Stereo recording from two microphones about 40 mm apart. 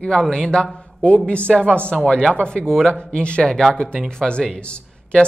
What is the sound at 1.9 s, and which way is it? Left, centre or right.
Speech, centre.